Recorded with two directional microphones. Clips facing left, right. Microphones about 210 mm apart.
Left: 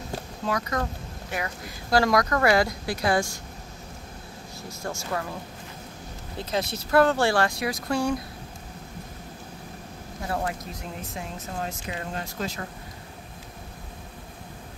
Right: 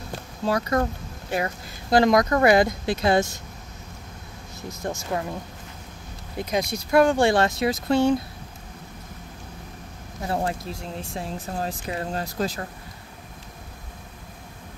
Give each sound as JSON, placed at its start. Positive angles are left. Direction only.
{"t": 0.5, "sound": "speech", "side_deg": -30}
{"t": 4.6, "sound": "speech", "side_deg": -20}
{"t": 6.3, "sound": "speech", "side_deg": -15}
{"t": 10.2, "sound": "speech", "side_deg": -30}